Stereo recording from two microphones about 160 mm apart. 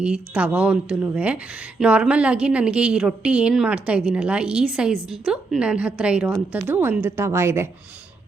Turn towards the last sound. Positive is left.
turn(degrees=-15)  # may be behind; listen again after turning